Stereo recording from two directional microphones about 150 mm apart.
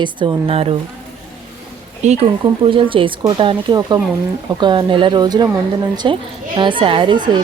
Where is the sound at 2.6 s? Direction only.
35° right (ahead or behind).